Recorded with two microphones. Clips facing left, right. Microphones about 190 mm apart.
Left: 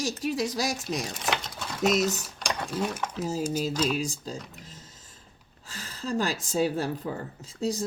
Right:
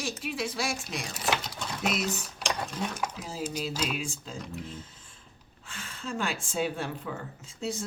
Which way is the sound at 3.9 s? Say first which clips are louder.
Left 5 dB; 35° left (ahead or behind).